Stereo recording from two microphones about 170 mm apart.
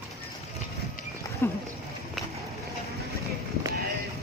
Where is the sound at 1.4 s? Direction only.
15° left (ahead or behind).